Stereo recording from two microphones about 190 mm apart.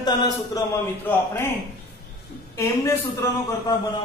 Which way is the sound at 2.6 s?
15° left (ahead or behind).